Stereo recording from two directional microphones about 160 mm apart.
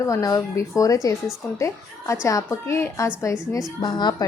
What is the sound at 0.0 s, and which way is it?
A woman's voice, 20° left (ahead or behind).